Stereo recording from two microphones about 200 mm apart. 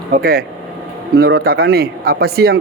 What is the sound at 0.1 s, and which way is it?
A man's voice, 50° right (ahead or behind).